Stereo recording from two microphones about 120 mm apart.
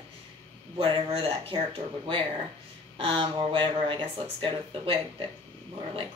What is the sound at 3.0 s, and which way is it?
Speech, 45° right (ahead or behind).